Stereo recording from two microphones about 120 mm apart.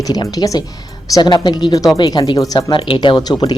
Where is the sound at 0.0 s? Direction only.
30° left (ahead or behind).